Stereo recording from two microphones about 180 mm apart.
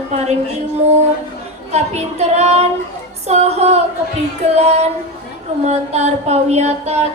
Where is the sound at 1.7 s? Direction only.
35° right (ahead or behind).